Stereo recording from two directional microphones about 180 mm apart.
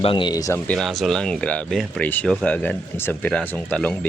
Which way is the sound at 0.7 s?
Centre (ahead or behind).